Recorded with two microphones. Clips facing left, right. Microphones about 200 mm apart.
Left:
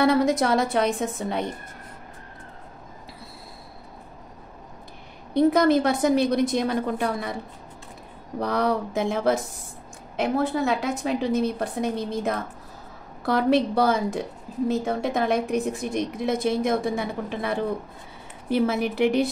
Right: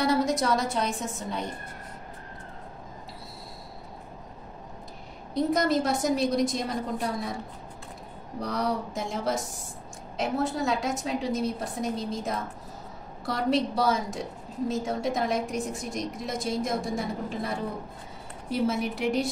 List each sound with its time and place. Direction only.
0.0 s a woman's voice: 60° left (ahead or behind)
5.5 s a woman's voice: 60° left (ahead or behind)
8.4 s a woman's voice: 65° left (ahead or behind)